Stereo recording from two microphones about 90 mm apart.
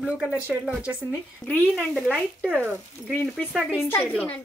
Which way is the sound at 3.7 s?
20° left (ahead or behind).